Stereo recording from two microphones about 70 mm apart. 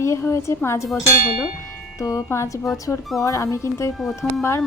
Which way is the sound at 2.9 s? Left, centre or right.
Centre.